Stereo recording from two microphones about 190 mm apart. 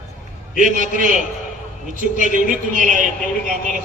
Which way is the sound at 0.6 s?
45° right (ahead or behind).